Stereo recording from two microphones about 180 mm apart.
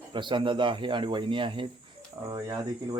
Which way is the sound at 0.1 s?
25° right (ahead or behind).